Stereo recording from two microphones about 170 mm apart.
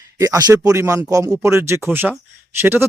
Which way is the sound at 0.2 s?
20° right (ahead or behind).